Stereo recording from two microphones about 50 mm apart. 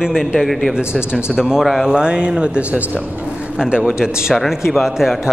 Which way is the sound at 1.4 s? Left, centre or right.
Centre.